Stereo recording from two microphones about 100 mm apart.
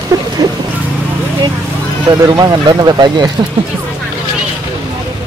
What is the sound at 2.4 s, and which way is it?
Speech, 40° right (ahead or behind).